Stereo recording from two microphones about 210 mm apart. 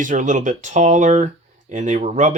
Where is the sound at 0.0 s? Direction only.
35° right (ahead or behind).